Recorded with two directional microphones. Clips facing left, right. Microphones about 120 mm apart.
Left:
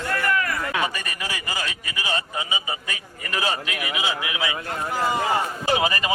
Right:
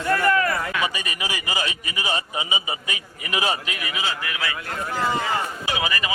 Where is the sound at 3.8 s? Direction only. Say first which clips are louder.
Left 2 dB; 5° left (ahead or behind).